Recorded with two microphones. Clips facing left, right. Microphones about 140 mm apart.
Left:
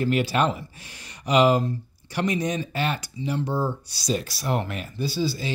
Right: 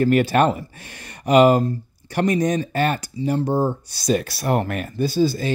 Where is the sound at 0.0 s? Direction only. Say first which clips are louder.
Right 6 dB; 50° right (ahead or behind).